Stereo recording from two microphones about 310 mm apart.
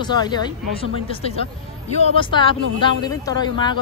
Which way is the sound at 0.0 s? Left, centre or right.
Centre.